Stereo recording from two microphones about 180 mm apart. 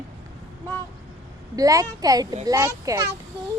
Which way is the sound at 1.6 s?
20° right (ahead or behind).